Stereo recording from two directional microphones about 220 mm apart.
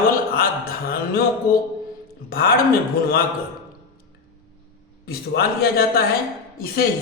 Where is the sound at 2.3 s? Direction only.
45° left (ahead or behind).